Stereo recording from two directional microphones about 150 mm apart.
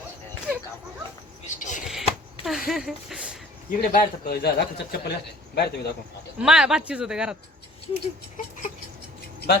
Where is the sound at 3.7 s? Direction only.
80° left.